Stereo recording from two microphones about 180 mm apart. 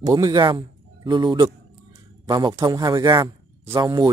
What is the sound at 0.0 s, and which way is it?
A man's voice, 20° right (ahead or behind).